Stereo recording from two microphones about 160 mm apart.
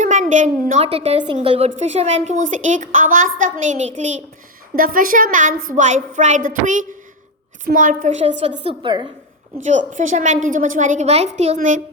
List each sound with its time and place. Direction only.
0.0 s a sound: 50° right (ahead or behind)
0.7 s a woman's voice: 40° right (ahead or behind)
4.8 s a woman's voice: 60° right (ahead or behind)
8.8 s a woman's voice: 30° right (ahead or behind)
9.6 s a woman's voice: 50° right (ahead or behind)